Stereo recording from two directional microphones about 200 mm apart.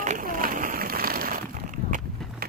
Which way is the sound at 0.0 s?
40° right (ahead or behind).